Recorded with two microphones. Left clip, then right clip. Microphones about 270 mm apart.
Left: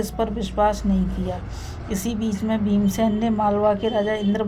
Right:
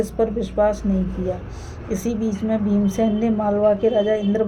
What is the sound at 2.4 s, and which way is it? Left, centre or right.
Speech, left.